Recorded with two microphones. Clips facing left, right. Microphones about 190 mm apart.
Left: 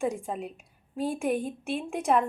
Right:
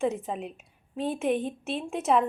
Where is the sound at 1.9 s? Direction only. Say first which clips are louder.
Right 1 dB; centre (ahead or behind).